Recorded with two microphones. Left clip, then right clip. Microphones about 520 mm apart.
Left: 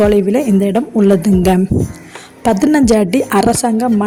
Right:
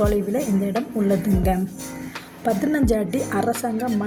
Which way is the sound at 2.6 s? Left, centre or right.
Right.